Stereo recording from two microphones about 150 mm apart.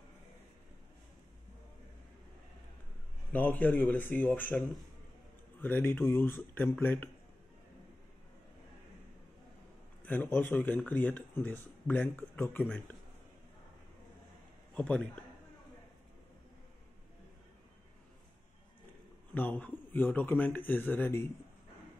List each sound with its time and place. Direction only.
3.3 s speech: 10° left (ahead or behind)
10.0 s speech: 10° left (ahead or behind)
14.7 s a man's voice: 10° left (ahead or behind)
19.3 s speech: 10° left (ahead or behind)